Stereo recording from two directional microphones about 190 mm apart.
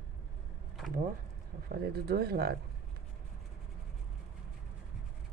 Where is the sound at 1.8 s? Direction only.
55° right (ahead or behind).